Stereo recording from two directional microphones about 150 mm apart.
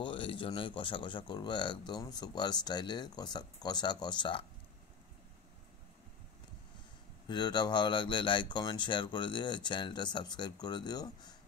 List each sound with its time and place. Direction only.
0.0 s speech: 35° left (ahead or behind)
7.2 s speech: 30° left (ahead or behind)